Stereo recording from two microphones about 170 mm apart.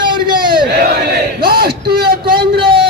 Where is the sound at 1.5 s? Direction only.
65° right (ahead or behind).